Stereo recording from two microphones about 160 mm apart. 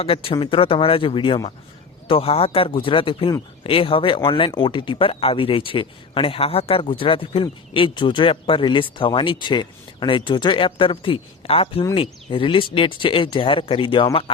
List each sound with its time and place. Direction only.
0.0 s speech: 35° left (ahead or behind)